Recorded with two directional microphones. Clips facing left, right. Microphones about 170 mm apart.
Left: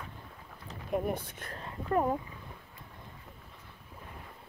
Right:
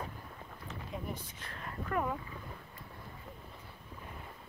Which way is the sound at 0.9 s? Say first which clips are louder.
Left 12 dB; 60° left (ahead or behind).